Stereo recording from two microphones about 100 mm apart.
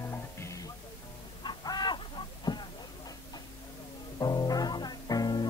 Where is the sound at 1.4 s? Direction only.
45° left (ahead or behind).